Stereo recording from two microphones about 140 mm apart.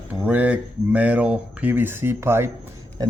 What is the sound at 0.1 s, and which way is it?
Speech, 10° right (ahead or behind).